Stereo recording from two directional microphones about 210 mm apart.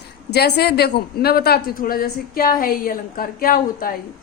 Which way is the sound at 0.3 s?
50° left (ahead or behind).